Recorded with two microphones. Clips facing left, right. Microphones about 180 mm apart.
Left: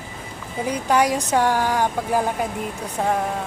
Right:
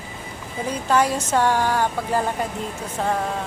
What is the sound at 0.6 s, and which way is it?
Speech, 10° left (ahead or behind).